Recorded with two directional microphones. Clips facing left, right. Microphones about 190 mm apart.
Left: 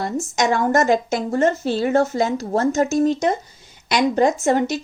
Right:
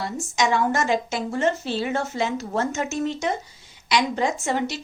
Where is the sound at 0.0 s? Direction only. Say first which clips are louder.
Left 4 dB; 45° left (ahead or behind).